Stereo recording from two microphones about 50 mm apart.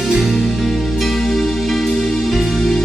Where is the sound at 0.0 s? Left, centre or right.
Centre.